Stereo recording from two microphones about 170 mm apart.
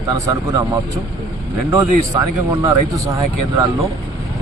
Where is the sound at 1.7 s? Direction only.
20° right (ahead or behind).